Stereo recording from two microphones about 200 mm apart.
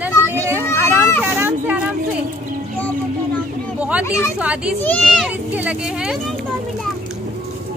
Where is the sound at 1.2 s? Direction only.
10° right (ahead or behind).